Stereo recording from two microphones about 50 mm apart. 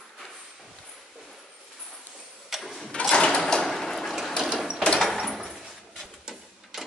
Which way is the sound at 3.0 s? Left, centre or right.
Centre.